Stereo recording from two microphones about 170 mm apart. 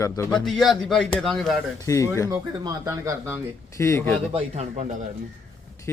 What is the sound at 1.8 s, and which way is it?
Speech, 20° left (ahead or behind).